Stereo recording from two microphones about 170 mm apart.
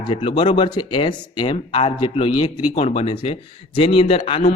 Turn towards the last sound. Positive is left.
turn(degrees=30)  # may be behind; listen again after turning